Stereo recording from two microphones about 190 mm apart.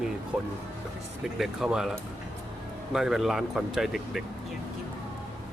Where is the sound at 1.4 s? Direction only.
5° right (ahead or behind).